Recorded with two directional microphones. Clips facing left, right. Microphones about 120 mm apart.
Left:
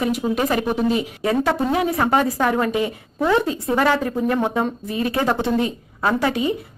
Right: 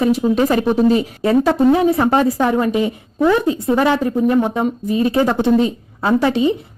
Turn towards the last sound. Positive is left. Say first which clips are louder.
# right 5 dB
turn(degrees=-25)  # may be behind; listen again after turning